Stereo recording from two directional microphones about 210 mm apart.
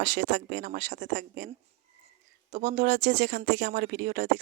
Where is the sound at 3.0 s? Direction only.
55° right (ahead or behind).